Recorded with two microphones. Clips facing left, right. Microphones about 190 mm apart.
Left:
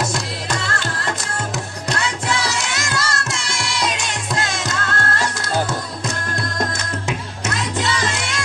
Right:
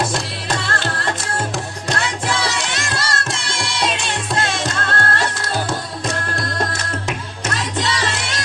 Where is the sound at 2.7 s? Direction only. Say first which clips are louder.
Even; 30° right (ahead or behind).